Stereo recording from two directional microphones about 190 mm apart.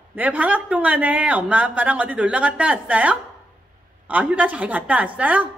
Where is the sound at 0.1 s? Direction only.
10° right (ahead or behind).